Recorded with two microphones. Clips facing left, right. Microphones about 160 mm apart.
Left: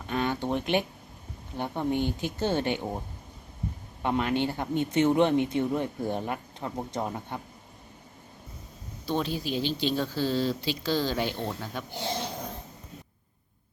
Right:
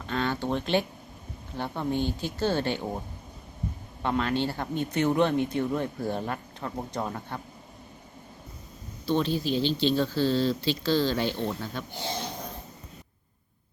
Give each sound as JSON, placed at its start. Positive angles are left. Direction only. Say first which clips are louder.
{"t": 0.1, "sound": "speech", "louder": "even", "side_deg": 15}
{"t": 4.0, "sound": "speech", "louder": "even", "side_deg": 15}
{"t": 9.0, "sound": "speech", "louder": "right 3 dB", "side_deg": 10}